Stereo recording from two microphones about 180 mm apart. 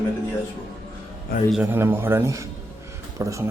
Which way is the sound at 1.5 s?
10° right (ahead or behind).